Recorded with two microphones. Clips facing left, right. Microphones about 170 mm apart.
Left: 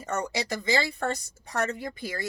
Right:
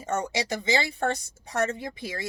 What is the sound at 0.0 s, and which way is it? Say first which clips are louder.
Speech: right 2 dB; 25° right (ahead or behind).